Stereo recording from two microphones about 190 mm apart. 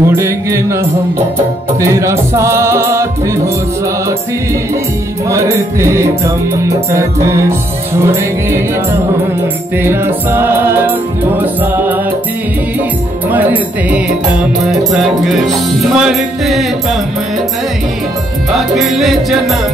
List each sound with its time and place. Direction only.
0.0 s music: 15° right (ahead or behind)
1.8 s music: 15° right (ahead or behind)
5.3 s music: 15° right (ahead or behind)
9.8 s music: 15° right (ahead or behind)
13.3 s music: 10° right (ahead or behind)
14.9 s speech: centre (ahead or behind)
18.5 s speech: centre (ahead or behind)